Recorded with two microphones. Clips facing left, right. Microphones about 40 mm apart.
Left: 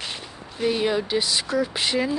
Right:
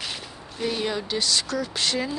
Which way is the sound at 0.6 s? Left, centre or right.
Centre.